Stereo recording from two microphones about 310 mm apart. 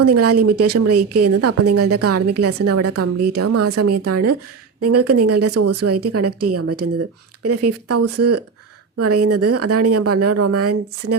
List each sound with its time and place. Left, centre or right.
0.0 s speech: right